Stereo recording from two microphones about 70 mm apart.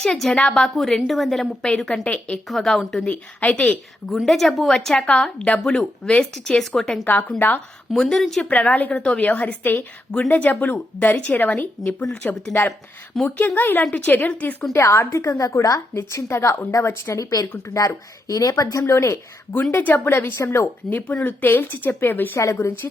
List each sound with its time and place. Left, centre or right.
0.0 s a woman's voice: centre
3.0 s a woman's voice: centre
4.3 s a woman's voice: centre
7.0 s speech: left
7.9 s a woman's voice: centre
8.4 s speech: centre
14.7 s a woman's voice: left
16.0 s a woman's voice: left
19.7 s a woman's voice: left
21.2 s speech: left
22.4 s a woman's voice: left